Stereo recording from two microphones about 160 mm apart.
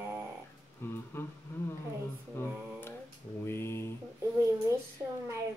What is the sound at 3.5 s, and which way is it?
Speech, 15° left (ahead or behind).